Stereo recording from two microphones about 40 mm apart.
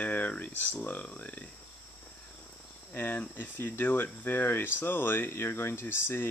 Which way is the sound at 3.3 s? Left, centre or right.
Left.